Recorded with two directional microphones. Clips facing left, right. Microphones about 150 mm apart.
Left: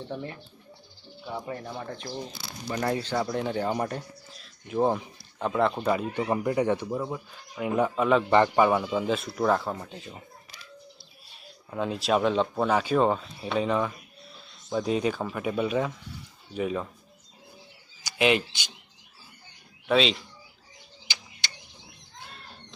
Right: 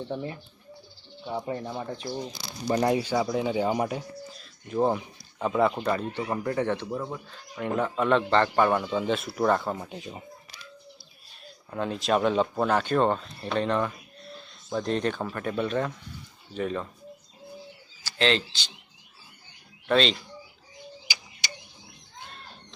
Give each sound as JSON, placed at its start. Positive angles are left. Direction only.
{"t": 0.1, "sound": "speech", "side_deg": -20}
{"t": 5.8, "sound": "speech", "side_deg": 10}
{"t": 9.7, "sound": "speech", "side_deg": -15}
{"t": 11.7, "sound": "speech", "side_deg": 0}
{"t": 18.0, "sound": "speech", "side_deg": 15}
{"t": 19.9, "sound": "speech", "side_deg": 0}